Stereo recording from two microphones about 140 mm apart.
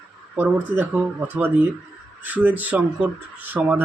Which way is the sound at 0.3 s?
10° right (ahead or behind).